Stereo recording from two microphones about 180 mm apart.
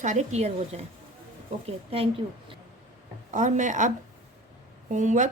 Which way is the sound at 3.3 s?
45° right (ahead or behind).